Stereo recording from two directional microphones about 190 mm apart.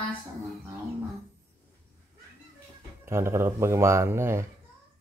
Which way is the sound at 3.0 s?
15° right (ahead or behind).